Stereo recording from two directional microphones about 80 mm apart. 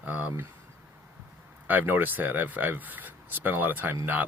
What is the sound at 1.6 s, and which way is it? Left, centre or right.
Speech, right.